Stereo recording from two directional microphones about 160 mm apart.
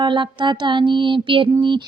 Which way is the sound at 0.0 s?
30° right (ahead or behind).